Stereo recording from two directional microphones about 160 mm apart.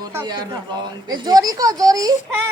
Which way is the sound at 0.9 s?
25° right (ahead or behind).